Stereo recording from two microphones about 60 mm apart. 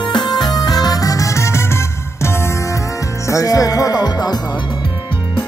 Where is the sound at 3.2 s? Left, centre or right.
Left.